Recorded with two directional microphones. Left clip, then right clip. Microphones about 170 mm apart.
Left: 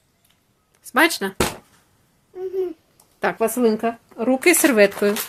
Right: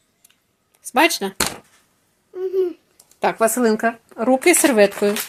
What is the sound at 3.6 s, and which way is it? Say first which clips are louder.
Speech: even; 25° right (ahead or behind).